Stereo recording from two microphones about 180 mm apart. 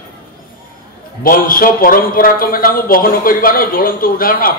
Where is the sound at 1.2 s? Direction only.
50° left (ahead or behind).